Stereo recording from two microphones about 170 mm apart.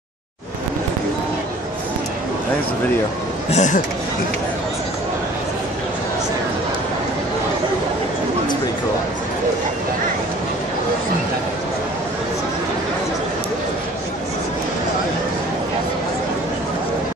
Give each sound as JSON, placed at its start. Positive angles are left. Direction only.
{"t": 3.5, "sound": "speech", "side_deg": 45}